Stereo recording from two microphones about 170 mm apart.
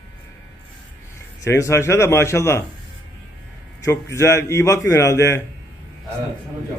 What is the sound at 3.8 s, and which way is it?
A man's voice, 20° left (ahead or behind).